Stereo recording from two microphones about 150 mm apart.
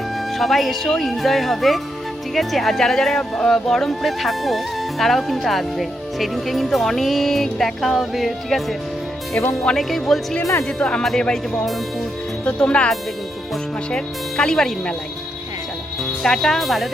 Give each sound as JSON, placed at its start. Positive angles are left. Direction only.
{"t": 0.3, "sound": "speech", "side_deg": 0}
{"t": 9.4, "sound": "speech", "side_deg": 20}
{"t": 9.6, "sound": "speech", "side_deg": 0}
{"t": 16.2, "sound": "speech", "side_deg": 0}